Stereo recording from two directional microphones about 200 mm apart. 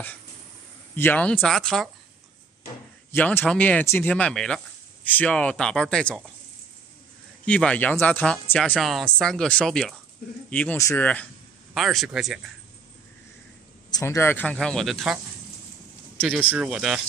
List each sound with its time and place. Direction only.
0.9 s speech: 10° left (ahead or behind)
3.1 s speech: 10° left (ahead or behind)
7.4 s speech: 5° left (ahead or behind)
13.8 s speech: 15° left (ahead or behind); by 15.1 s centre (ahead or behind)
16.2 s speech: 5° right (ahead or behind)